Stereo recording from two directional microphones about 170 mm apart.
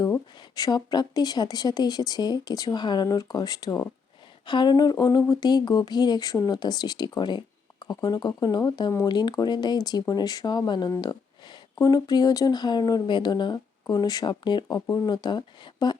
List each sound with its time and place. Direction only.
0.0 s speech: 20° left (ahead or behind)